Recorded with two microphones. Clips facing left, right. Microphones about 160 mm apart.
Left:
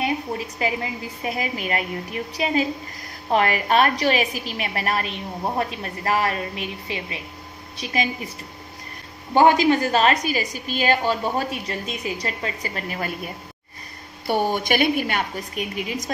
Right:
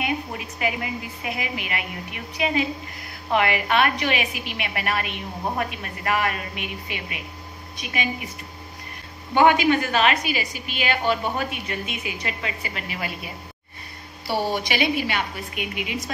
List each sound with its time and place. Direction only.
0.6 s a woman's voice: 35° left (ahead or behind)
9.3 s a woman's voice: 35° left (ahead or behind)